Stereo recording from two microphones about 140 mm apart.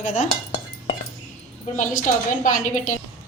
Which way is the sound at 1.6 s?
65° left (ahead or behind).